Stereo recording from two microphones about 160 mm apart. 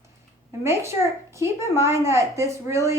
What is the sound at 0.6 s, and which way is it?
A woman's voice, 15° right (ahead or behind).